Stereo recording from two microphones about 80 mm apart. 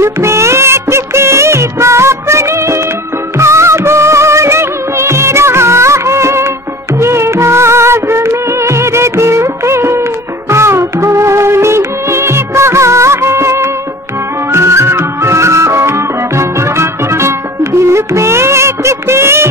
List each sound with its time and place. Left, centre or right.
0.0 s music of bollywood: right
3.3 s music: right
7.0 s music of bollywood: right
10.5 s music: right